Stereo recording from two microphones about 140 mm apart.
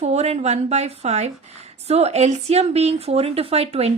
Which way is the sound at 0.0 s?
50° right (ahead or behind).